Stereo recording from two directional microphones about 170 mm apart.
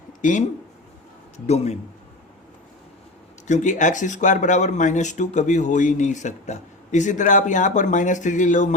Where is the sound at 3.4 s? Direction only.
45° left (ahead or behind).